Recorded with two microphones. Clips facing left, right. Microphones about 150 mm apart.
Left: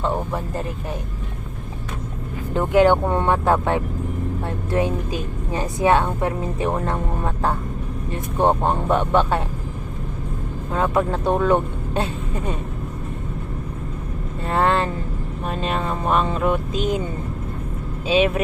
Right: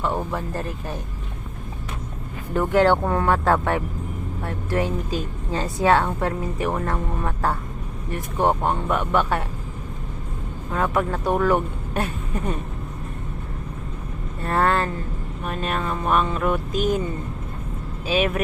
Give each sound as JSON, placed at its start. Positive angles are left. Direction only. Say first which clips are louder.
{"t": 0.2, "sound": "speech", "louder": "left 1 dB", "side_deg": 15}
{"t": 2.5, "sound": "a woman's voice", "louder": "left 2 dB", "side_deg": 20}
{"t": 10.7, "sound": "speech", "louder": "left 2 dB", "side_deg": 25}
{"t": 14.4, "sound": "vehicle", "louder": "left 1 dB", "side_deg": 20}
{"t": 15.4, "sound": "a woman's voice", "louder": "left 2 dB", "side_deg": 30}
{"t": 18.1, "sound": "a woman's voice", "louder": "left 3 dB", "side_deg": 25}